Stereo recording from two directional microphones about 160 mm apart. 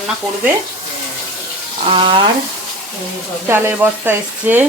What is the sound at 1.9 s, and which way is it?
Speech, 30° right (ahead or behind).